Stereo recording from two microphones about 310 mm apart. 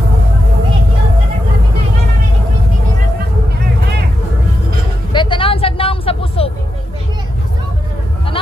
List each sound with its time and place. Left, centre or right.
5.1 s vehicle: centre